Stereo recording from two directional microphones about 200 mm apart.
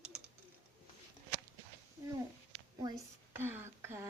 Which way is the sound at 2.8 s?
20° right (ahead or behind).